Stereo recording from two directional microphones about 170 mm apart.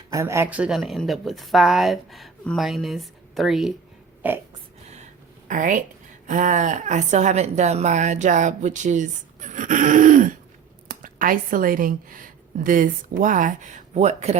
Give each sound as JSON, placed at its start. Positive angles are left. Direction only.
{"t": 0.1, "sound": "speech", "side_deg": -15}
{"t": 4.2, "sound": "burping", "side_deg": -10}
{"t": 5.5, "sound": "a woman's voice", "side_deg": -50}